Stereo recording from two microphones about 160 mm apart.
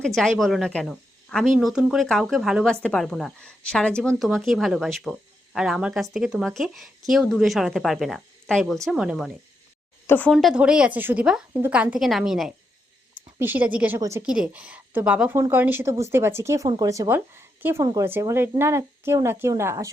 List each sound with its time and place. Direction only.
0.0 s speech: 5° left (ahead or behind)
10.1 s speech: 10° left (ahead or behind)
10.3 s speech: 5° right (ahead or behind)